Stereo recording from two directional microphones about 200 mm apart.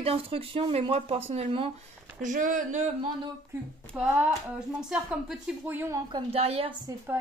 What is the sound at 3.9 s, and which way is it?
Speech, 5° right (ahead or behind).